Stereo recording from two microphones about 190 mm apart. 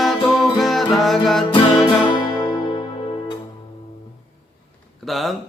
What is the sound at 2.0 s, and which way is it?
Music, 20° left (ahead or behind).